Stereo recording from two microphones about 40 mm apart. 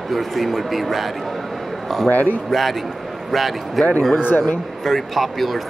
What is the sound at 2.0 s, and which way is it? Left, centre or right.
Speech, left.